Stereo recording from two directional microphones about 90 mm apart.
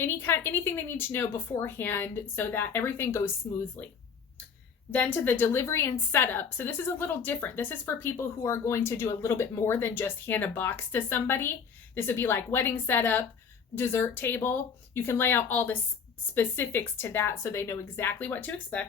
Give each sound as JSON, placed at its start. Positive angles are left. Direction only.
{"t": 0.0, "sound": "a woman's voice", "side_deg": 25}
{"t": 4.9, "sound": "a woman's voice", "side_deg": 20}